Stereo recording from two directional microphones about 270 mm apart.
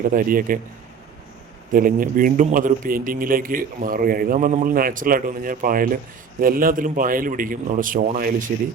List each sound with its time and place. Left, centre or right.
0.1 s a man's voice: right
1.7 s a man's voice: right